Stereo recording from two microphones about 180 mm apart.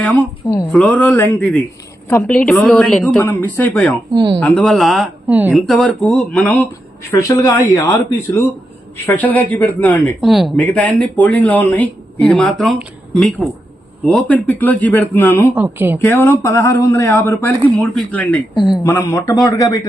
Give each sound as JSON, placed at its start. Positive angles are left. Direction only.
{"t": 0.0, "sound": "speech", "side_deg": 5}
{"t": 4.1, "sound": "speech", "side_deg": -25}
{"t": 4.4, "sound": "speech", "side_deg": 5}
{"t": 10.2, "sound": "speech", "side_deg": 0}
{"t": 15.5, "sound": "speech", "side_deg": -10}
{"t": 16.0, "sound": "speech", "side_deg": 10}
{"t": 18.5, "sound": "speech", "side_deg": 25}